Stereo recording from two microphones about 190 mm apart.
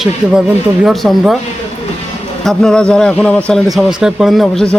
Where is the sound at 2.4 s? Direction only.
5° left (ahead or behind).